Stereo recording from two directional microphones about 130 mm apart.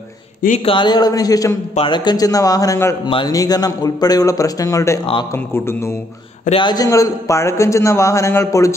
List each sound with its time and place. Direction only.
0.7 s a man's voice: 35° left (ahead or behind)
3.1 s a man's voice: 40° left (ahead or behind)
3.3 s a man's voice: 30° left (ahead or behind)
6.5 s a man's voice: 35° left (ahead or behind)